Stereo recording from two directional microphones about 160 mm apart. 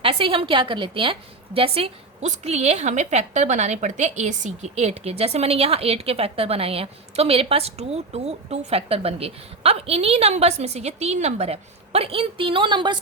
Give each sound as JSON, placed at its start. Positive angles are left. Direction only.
{"t": 0.0, "sound": "a woman's voice", "side_deg": -35}